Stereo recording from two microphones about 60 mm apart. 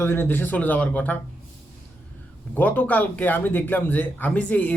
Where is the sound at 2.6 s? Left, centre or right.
Left.